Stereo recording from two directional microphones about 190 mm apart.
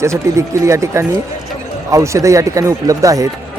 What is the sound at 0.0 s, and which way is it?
Speech, 15° right (ahead or behind).